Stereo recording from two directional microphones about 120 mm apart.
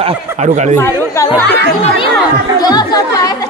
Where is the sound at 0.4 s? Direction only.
80° right.